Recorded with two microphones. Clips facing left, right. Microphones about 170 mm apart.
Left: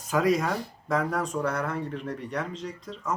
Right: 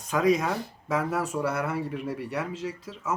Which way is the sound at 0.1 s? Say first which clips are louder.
Right 1 dB; centre (ahead or behind).